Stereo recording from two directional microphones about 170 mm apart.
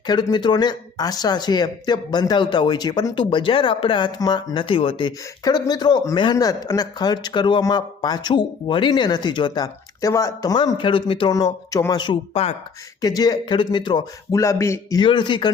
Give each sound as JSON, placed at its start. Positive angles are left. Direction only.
{"t": 0.1, "sound": "speech", "side_deg": 25}
{"t": 13.0, "sound": "speech", "side_deg": 20}